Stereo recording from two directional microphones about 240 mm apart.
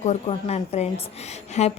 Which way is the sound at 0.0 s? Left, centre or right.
Left.